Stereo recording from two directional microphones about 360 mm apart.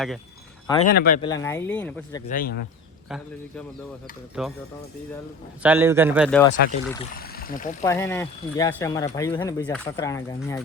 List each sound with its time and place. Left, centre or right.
0.9 s speech: left
1.2 s speech: centre
2.2 s speech: left
4.4 s speech: centre
5.6 s speech: centre
6.4 s speech: centre
7.2 s speech: left
7.9 s speech: centre